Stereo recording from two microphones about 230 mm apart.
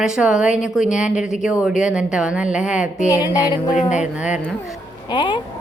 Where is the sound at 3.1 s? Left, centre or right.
Centre.